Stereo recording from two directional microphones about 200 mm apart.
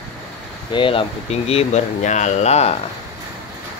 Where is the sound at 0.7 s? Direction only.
25° left (ahead or behind).